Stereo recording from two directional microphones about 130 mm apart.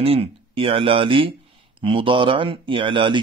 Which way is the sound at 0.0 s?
50° right (ahead or behind).